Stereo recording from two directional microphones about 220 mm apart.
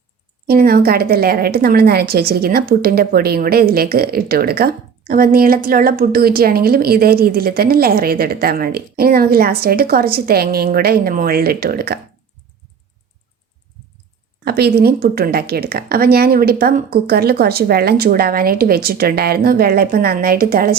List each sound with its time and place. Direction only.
0.4 s a woman's voice: 45° right (ahead or behind)
14.4 s a woman's voice: 45° right (ahead or behind)